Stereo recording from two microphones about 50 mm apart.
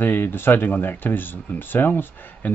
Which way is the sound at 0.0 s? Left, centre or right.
Left.